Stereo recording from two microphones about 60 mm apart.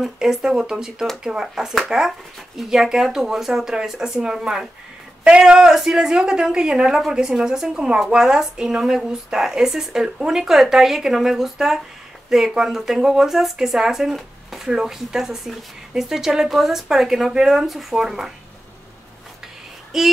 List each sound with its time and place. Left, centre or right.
0.0 s speech: centre
19.9 s female singing: centre